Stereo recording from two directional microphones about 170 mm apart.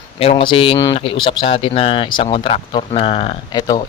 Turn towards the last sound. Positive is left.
turn(degrees=30)  # may be behind; listen again after turning